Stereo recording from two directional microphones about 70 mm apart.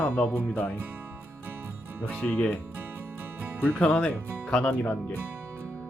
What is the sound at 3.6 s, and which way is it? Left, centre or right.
Speech, centre.